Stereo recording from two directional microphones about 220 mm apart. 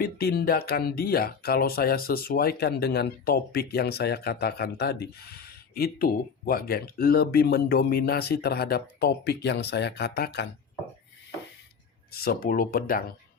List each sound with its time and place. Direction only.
0.0 s speech: 45° left (ahead or behind)
12.1 s speech: 45° left (ahead or behind)